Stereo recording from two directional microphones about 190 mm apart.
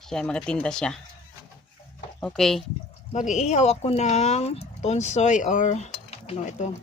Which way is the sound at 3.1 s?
40° left (ahead or behind).